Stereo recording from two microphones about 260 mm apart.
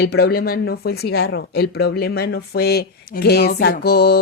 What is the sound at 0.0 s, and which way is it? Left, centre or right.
Speech, left.